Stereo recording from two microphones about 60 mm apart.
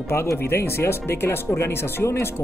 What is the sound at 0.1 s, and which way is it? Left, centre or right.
Speech, left.